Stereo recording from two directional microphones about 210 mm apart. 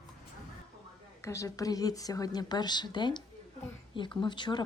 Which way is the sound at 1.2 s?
15° left (ahead or behind).